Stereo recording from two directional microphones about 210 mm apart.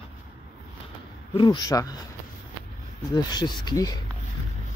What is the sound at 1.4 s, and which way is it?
Speech, 20° left (ahead or behind).